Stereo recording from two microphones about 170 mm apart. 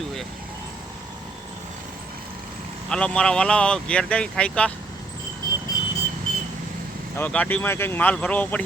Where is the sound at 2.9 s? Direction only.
5° left (ahead or behind).